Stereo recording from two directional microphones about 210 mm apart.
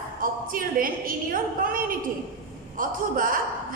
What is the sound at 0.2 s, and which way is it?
A woman's voice, 40° right (ahead or behind).